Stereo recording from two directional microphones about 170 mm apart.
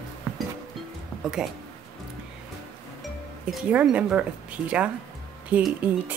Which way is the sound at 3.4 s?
5° right (ahead or behind).